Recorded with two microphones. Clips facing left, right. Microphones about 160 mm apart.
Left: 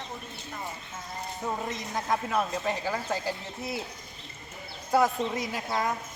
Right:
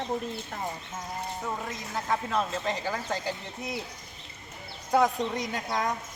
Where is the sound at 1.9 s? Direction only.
15° left (ahead or behind).